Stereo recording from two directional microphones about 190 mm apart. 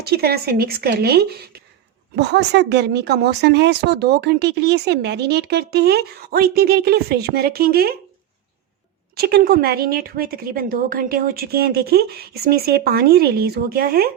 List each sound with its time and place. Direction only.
0.0 s speech: 55° right (ahead or behind)
9.1 s speech: 55° right (ahead or behind)